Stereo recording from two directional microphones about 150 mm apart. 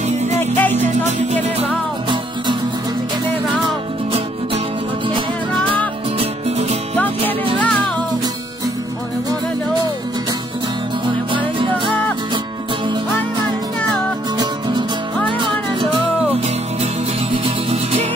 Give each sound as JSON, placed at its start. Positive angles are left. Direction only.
{"t": 0.4, "sound": "music", "side_deg": 15}
{"t": 0.7, "sound": "music", "side_deg": -50}
{"t": 7.0, "sound": "music", "side_deg": 10}
{"t": 11.3, "sound": "music", "side_deg": -35}